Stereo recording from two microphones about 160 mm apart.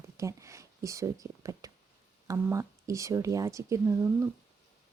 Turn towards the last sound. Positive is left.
turn(degrees=-15)  # may be behind; listen again after turning